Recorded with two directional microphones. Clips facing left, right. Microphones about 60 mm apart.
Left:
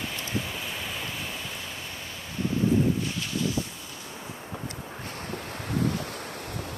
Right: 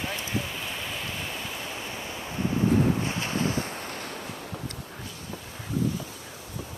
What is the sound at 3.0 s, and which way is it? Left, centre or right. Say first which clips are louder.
Boat: right 2 dB; right.